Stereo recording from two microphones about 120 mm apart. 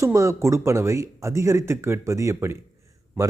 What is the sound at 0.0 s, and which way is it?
A man's voice, 25° right (ahead or behind).